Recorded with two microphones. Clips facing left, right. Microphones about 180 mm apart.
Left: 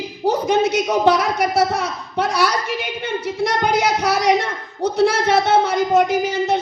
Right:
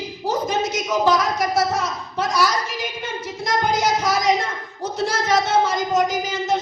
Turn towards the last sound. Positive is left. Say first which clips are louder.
# left 4 dB
turn(degrees=60)  # may be behind; listen again after turning